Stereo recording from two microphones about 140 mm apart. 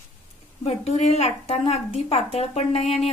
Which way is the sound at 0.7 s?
50° left (ahead or behind).